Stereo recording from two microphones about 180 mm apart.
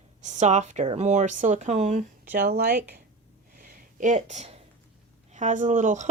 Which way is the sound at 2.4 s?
60° right (ahead or behind).